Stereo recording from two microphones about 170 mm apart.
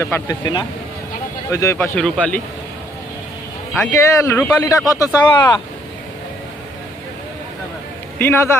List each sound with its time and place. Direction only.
0.0 s speech: 20° left (ahead or behind)
3.8 s speech: 15° left (ahead or behind)
8.2 s speech: 15° left (ahead or behind)